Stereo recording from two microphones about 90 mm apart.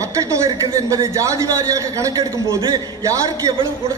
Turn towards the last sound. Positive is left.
turn(degrees=-40)  # may be behind; listen again after turning